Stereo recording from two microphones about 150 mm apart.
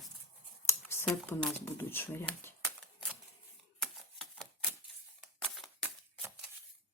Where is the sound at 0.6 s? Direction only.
15° left (ahead or behind).